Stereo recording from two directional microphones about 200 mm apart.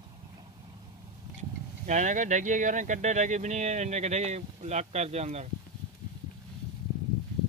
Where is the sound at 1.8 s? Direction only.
35° right (ahead or behind).